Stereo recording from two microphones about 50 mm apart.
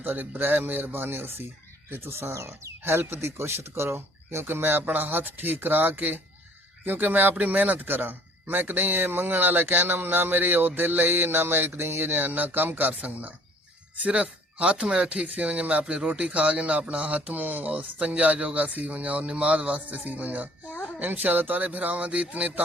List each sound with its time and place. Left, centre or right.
0.0 s speech: right
1.9 s speech: right
2.3 s speech: right
2.8 s a man's voice: right
15.8 s a man's voice: centre
16.0 s a man's voice: right